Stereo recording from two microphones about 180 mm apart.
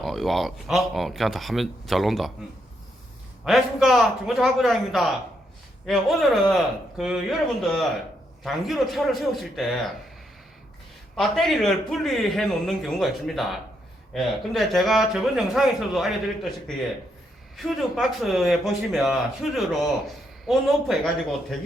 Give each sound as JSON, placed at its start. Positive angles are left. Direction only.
{"t": 0.0, "sound": "a man's voice", "side_deg": 0}
{"t": 3.4, "sound": "a man's voice", "side_deg": 0}
{"t": 11.2, "sound": "a man's voice", "side_deg": 0}